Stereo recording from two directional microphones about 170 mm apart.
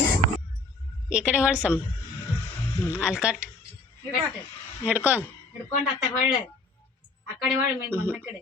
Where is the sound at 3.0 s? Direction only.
5° right (ahead or behind).